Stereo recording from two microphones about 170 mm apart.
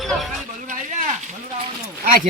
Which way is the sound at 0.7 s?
45° right (ahead or behind).